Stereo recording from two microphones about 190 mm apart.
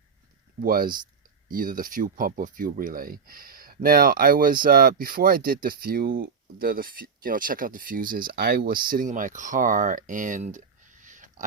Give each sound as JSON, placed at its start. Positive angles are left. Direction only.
{"t": 0.6, "sound": "speech", "side_deg": -50}